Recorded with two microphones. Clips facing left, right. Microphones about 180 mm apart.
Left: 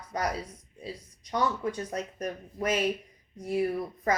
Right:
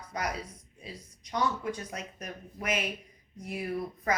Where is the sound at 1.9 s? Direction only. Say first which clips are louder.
Left 7 dB; 35° left (ahead or behind).